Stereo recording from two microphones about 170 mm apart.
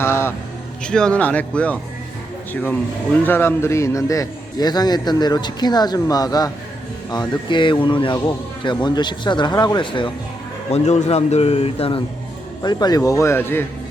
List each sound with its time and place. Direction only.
0.0 s a sound: 15° left (ahead or behind)
0.9 s a man's voice: 5° left (ahead or behind); by 10.1 s 30° left (ahead or behind)
10.7 s speech: 40° left (ahead or behind); by 13.7 s 15° left (ahead or behind)